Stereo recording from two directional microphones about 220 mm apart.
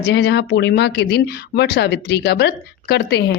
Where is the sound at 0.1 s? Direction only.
50° left (ahead or behind).